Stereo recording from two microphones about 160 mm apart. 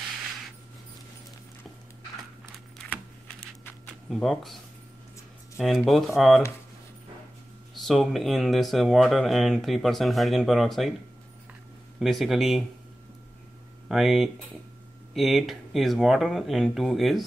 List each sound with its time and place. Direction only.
4.1 s speech: centre (ahead or behind)
5.6 s speech: centre (ahead or behind)
7.7 s speech: centre (ahead or behind)
12.0 s speech: centre (ahead or behind)
13.8 s speech: centre (ahead or behind)